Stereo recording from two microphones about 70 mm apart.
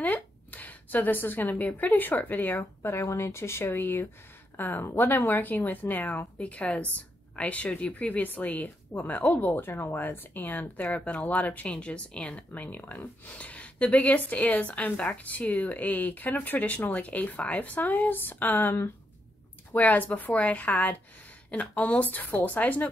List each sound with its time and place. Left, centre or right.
0.0 s speech: left